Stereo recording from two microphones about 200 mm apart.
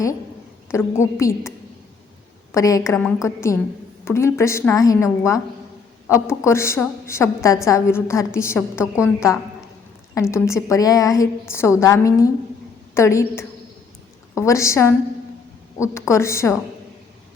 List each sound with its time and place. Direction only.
0.7 s a woman's voice: 15° left (ahead or behind)